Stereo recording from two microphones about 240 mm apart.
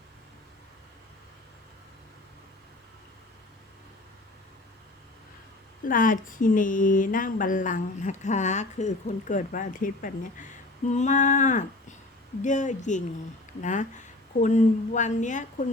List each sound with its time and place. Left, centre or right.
5.8 s speech: left